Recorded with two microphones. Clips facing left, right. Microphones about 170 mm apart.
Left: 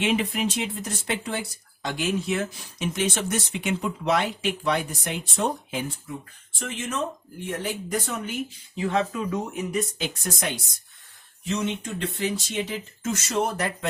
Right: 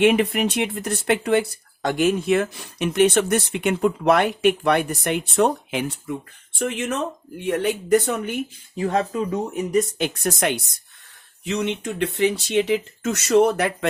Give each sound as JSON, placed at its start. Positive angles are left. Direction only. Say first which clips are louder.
{"t": 0.0, "sound": "speech", "louder": "right 7 dB", "side_deg": -60}
{"t": 8.7, "sound": "speech", "louder": "right 3 dB", "side_deg": -40}
{"t": 10.0, "sound": "speech", "louder": "right 7 dB", "side_deg": -70}